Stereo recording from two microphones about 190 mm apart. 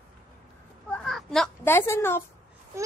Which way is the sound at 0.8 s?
5° left (ahead or behind).